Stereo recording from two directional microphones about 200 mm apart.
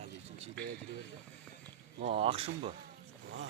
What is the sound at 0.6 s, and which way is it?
Speech, 5° left (ahead or behind).